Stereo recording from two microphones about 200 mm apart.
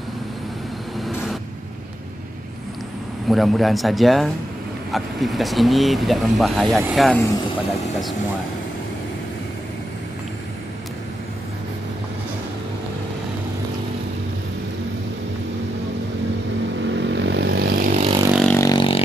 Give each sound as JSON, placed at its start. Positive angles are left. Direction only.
{"t": 3.3, "sound": "speech", "side_deg": 0}
{"t": 16.9, "sound": "vehicle", "side_deg": -60}
{"t": 18.3, "sound": "vehicle", "side_deg": 5}
{"t": 18.6, "sound": "vehicle", "side_deg": 20}